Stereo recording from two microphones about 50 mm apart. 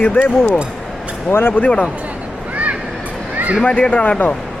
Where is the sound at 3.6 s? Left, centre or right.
Left.